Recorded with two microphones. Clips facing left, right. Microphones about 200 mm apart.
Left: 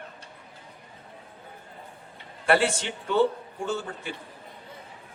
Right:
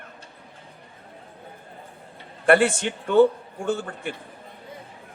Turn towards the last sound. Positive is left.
turn(degrees=-55)  # may be behind; listen again after turning